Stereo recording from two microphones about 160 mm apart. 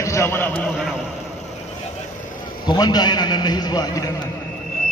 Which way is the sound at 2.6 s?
25° left (ahead or behind).